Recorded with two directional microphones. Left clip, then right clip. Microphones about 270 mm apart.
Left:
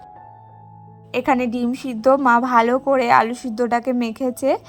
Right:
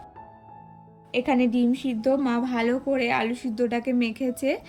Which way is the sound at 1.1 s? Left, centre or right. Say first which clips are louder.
Left 4 dB; centre.